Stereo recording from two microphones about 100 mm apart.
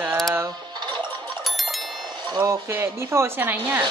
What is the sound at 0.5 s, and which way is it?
Music, 50° right (ahead or behind).